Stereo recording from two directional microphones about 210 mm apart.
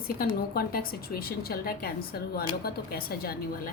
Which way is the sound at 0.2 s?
45° left (ahead or behind).